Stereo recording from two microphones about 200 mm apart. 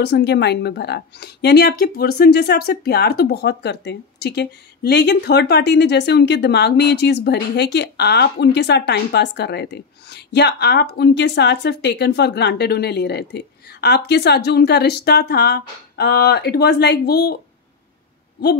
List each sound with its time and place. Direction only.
0.0 s speech: 55° left (ahead or behind)